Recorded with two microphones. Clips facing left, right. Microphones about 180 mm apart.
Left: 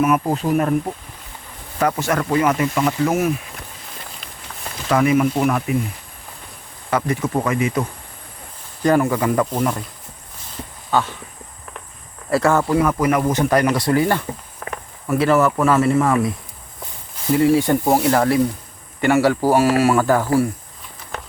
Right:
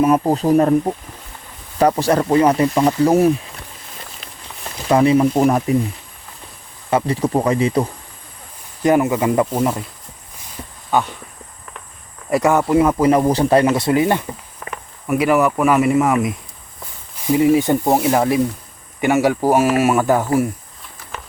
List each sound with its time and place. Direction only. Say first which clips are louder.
0.0 s speech: right 3 dB; 30° right (ahead or behind)
4.9 s speech: right 3 dB; 30° right (ahead or behind)
6.9 s speech: right 3 dB; 30° right (ahead or behind)
8.8 s speech: right 2 dB; 20° right (ahead or behind)
10.9 s speech: right 1 dB; 15° right (ahead or behind)
12.3 s speech: right 2 dB; 15° right (ahead or behind)
14.6 s walk: left 1 dB; 60° left (ahead or behind)
15.0 s speech: right 1 dB; 15° right (ahead or behind)
17.3 s speech: right 1 dB; 20° right (ahead or behind)